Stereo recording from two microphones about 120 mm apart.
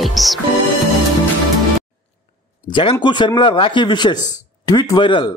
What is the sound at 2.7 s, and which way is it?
A man's voice, 40° left (ahead or behind).